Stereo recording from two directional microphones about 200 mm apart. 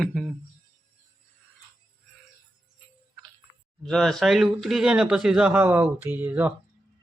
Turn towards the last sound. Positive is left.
turn(degrees=-10)  # may be behind; listen again after turning